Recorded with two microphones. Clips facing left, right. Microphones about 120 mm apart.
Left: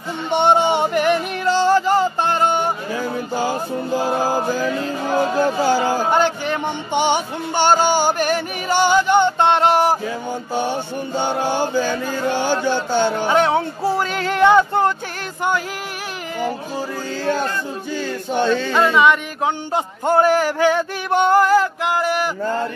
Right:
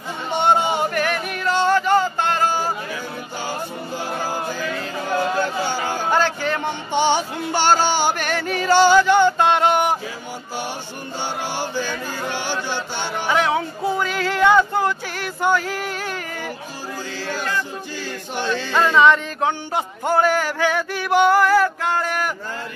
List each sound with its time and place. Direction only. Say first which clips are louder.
0.3 s music: left 3 dB; 25° left (ahead or behind)
4.2 s music: left 6 dB; 40° left (ahead or behind)
5.4 s a sound: left 6 dB; 35° left (ahead or behind)
6.0 s music: left 2 dB; 20° left (ahead or behind); by 9.9 s 35° left (ahead or behind)
13.3 s music: right 1 dB; 30° left (ahead or behind)
18.9 s a sound: right 3 dB; 15° left (ahead or behind)